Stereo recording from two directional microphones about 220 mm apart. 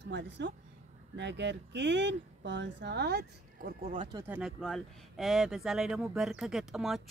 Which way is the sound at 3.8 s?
25° right (ahead or behind).